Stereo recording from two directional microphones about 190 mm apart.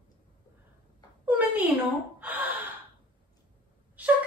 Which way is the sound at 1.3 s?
10° right (ahead or behind).